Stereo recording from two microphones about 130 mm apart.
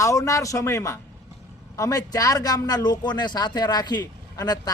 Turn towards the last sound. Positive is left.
turn(degrees=30)  # may be behind; listen again after turning